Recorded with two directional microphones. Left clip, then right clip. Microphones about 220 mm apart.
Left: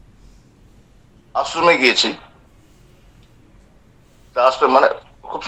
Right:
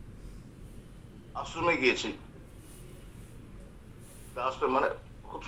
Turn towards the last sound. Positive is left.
turn(degrees=50)  # may be behind; listen again after turning